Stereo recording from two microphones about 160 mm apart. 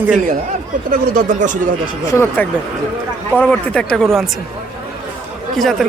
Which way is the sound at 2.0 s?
20° left (ahead or behind).